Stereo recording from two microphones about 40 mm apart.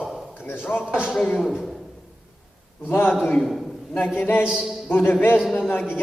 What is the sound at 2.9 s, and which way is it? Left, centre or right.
Speech, left.